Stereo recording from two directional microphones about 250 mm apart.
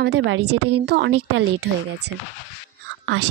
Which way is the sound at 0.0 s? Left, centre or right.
Right.